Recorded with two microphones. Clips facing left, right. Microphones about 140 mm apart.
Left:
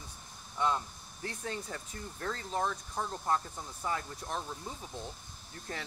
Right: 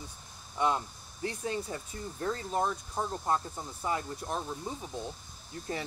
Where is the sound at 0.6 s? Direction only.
15° right (ahead or behind).